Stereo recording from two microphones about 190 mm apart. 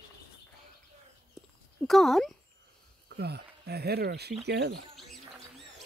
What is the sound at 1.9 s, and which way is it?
Speech, centre (ahead or behind).